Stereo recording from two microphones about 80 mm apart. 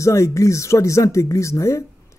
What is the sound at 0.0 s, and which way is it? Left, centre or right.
Speech, left.